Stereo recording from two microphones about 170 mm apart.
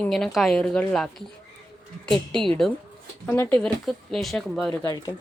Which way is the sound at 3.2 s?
15° left (ahead or behind).